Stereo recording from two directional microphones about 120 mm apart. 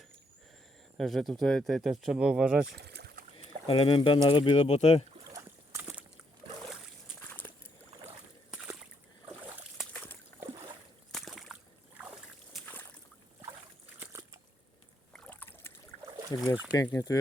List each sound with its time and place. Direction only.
0.9 s speech: centre (ahead or behind)
3.7 s speech: 45° left (ahead or behind)
4.5 s speech: 65° left (ahead or behind)
5.3 s a sound: 20° right (ahead or behind)
7.3 s a sound: 15° left (ahead or behind)
8.4 s slosh: 5° right (ahead or behind)
9.9 s a sound: 15° left (ahead or behind)
10.4 s rowboat: 25° right (ahead or behind)
11.1 s slosh: centre (ahead or behind)
12.6 s boat: 15° left (ahead or behind)
14.0 s trickle: 20° right (ahead or behind)
15.1 s boat: 10° left (ahead or behind)
16.0 s boat: 40° right (ahead or behind)
16.9 s speech: 30° left (ahead or behind)